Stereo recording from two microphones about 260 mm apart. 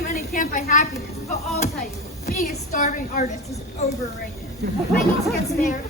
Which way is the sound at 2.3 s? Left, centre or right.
Left.